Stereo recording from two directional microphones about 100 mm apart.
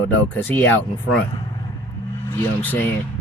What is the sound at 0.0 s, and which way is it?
Speech, 20° left (ahead or behind).